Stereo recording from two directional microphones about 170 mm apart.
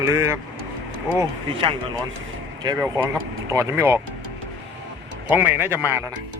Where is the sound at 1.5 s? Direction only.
30° right (ahead or behind).